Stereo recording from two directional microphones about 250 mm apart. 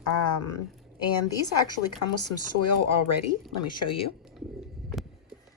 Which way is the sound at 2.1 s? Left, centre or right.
Left.